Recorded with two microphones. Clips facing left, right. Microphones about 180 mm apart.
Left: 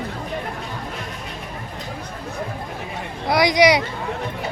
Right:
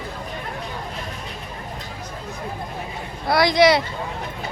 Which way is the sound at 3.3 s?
15° left (ahead or behind).